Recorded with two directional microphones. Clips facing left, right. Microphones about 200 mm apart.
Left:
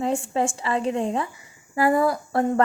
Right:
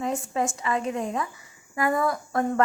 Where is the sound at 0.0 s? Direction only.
30° left (ahead or behind).